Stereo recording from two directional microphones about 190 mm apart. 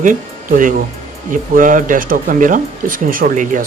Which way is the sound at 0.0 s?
45° right (ahead or behind).